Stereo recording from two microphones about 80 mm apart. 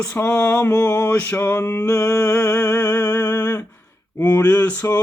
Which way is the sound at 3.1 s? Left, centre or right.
Left.